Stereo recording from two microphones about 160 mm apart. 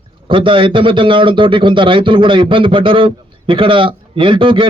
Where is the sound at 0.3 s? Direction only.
30° right (ahead or behind).